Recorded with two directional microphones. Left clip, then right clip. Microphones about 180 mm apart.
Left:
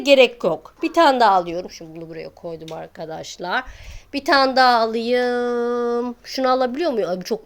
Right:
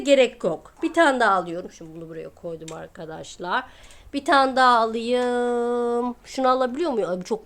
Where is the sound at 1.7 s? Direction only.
45° right (ahead or behind).